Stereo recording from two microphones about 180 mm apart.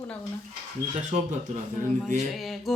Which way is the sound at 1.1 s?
35° right (ahead or behind).